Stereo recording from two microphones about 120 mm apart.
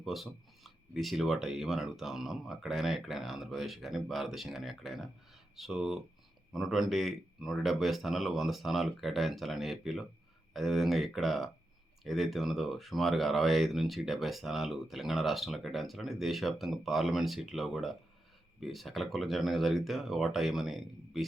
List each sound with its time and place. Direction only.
0.0 s speech: centre (ahead or behind)